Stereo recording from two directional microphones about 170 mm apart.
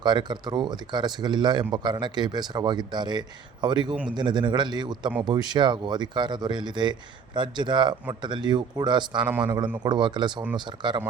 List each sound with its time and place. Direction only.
0.0 s speech: 25° right (ahead or behind)
9.2 s a man's voice: 10° right (ahead or behind)
9.8 s speech: 25° right (ahead or behind)